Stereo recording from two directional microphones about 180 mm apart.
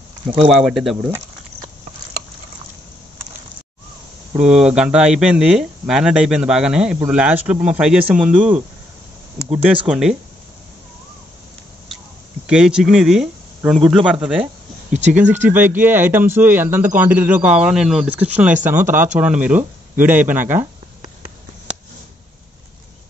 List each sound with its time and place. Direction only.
0.5 s speech: centre (ahead or behind)
4.4 s speech: 5° right (ahead or behind)
12.4 s speech: 5° right (ahead or behind)
14.4 s a sound: 40° right (ahead or behind)
15.4 s speech: 10° right (ahead or behind)